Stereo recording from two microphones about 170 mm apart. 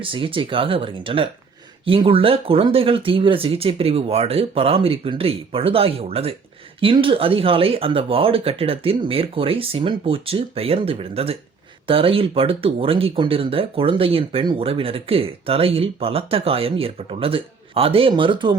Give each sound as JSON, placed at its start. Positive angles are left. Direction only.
{"t": 0.0, "sound": "speech", "side_deg": -30}